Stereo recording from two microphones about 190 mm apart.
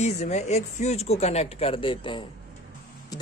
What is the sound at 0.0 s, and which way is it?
Speech, 35° left (ahead or behind).